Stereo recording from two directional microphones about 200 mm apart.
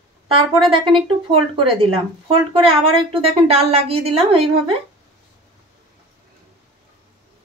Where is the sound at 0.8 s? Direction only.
25° right (ahead or behind).